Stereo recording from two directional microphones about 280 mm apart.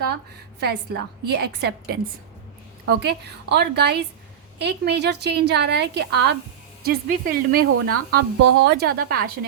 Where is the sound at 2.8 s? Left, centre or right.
Right.